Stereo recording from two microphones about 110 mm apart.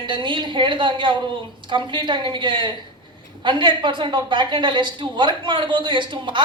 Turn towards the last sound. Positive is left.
turn(degrees=-45)  # may be behind; listen again after turning